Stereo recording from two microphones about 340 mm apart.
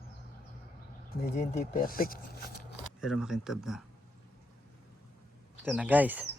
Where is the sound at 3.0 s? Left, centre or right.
Centre.